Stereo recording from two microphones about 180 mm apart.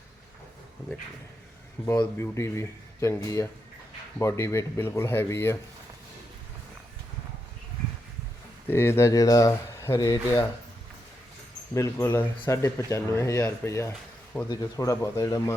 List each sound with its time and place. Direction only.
1.9 s speech: 15° left (ahead or behind)
8.6 s speech: 15° left (ahead or behind)
11.7 s speech: 15° left (ahead or behind)